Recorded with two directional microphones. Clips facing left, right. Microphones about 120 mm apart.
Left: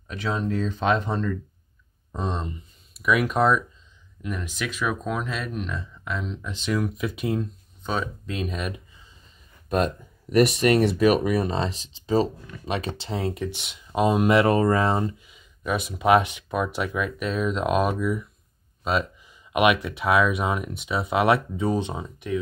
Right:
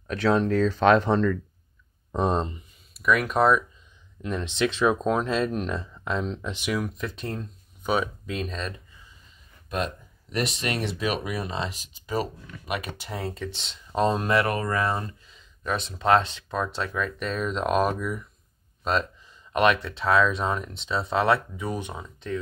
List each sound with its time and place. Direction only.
0.1 s speech: 75° right (ahead or behind); by 1.4 s 90° right
2.9 s speech: 5° left (ahead or behind)
4.2 s speech: 25° right (ahead or behind)
6.4 s speech: 15° right (ahead or behind)
6.7 s speech: centre (ahead or behind)
7.8 s speech: 10° right (ahead or behind)
8.4 s speech: 10° left (ahead or behind)
10.3 s speech: 55° left (ahead or behind); by 22.4 s 15° left (ahead or behind)